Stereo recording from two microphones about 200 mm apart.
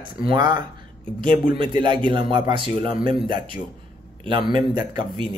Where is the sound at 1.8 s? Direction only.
25° right (ahead or behind).